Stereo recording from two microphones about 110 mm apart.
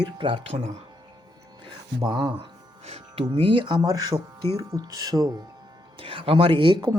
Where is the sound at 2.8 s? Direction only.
65° right (ahead or behind); by 3.8 s 45° right (ahead or behind).